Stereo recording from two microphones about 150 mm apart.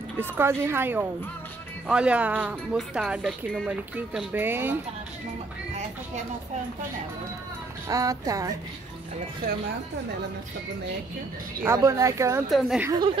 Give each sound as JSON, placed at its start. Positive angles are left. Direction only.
{"t": 0.2, "sound": "speech", "side_deg": -15}
{"t": 7.9, "sound": "speech", "side_deg": -20}
{"t": 11.6, "sound": "speech", "side_deg": -20}
{"t": 12.4, "sound": "a woman's voice", "side_deg": 0}